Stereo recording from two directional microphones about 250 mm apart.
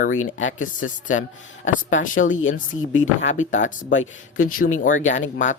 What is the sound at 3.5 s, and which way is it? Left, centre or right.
Speech, left.